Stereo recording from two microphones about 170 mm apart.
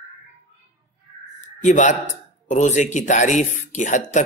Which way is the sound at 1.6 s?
50° left (ahead or behind).